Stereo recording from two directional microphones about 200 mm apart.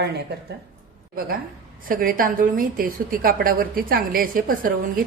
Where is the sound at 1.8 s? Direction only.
45° right (ahead or behind).